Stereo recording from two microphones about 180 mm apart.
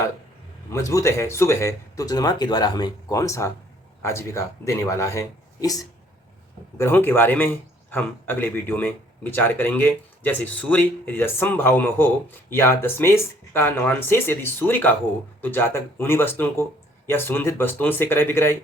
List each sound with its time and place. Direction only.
0.7 s a man's voice: 15° left (ahead or behind)